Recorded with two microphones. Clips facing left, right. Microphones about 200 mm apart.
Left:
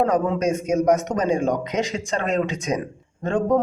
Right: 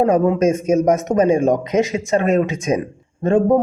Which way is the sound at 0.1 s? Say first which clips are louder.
Right 6 dB; 25° right (ahead or behind).